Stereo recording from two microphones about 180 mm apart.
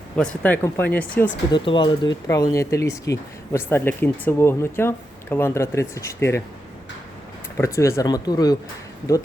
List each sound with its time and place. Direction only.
0.2 s speech: 5° left (ahead or behind)
1.5 s speech: 25° left (ahead or behind)
7.5 s speech: 15° left (ahead or behind)